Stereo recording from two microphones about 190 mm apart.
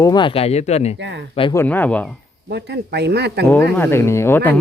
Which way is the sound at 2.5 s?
60° right (ahead or behind).